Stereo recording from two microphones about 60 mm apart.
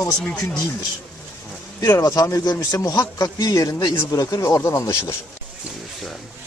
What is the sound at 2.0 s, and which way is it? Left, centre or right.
A man's voice, left.